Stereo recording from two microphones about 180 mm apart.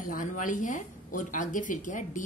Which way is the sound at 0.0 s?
50° left (ahead or behind).